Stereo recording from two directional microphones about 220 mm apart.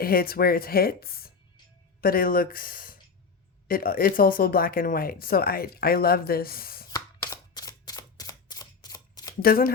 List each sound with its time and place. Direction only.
0.0 s speech: 45° left (ahead or behind)
6.9 s camera: 15° left (ahead or behind)
9.4 s speech: 40° left (ahead or behind)